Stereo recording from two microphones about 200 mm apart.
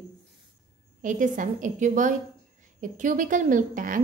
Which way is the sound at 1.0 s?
40° right (ahead or behind).